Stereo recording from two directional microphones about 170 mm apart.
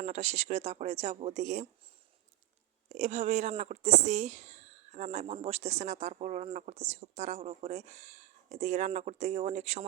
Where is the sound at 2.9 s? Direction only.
45° right (ahead or behind).